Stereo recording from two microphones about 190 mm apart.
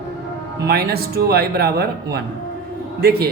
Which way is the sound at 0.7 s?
55° right (ahead or behind).